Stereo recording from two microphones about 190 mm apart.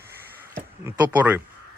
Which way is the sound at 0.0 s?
55° right (ahead or behind).